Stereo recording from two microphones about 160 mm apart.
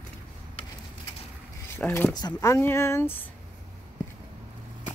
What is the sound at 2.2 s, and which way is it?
Speech, 20° left (ahead or behind).